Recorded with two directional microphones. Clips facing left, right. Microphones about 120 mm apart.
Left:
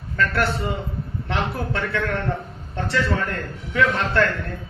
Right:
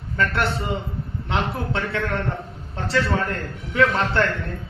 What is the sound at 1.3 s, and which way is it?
A man's voice, 25° right (ahead or behind).